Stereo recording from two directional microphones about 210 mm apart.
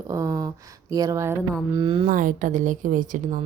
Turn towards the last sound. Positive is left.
turn(degrees=-40)  # may be behind; listen again after turning